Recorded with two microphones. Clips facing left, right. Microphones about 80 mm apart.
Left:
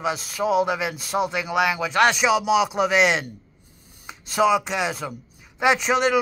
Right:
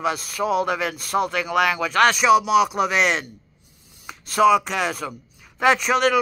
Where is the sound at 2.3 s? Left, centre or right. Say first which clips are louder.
Right 4 dB; right.